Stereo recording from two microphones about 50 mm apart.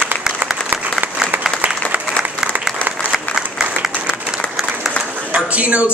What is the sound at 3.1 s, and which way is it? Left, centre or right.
Applause, centre.